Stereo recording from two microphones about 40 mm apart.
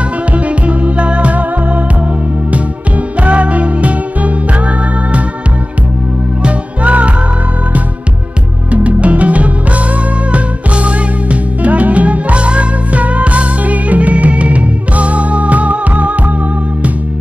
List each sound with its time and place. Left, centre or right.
0.3 s music: right
3.2 s music: right
6.4 s music: right
8.7 s music: right